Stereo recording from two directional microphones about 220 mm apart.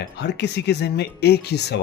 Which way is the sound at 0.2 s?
50° left (ahead or behind).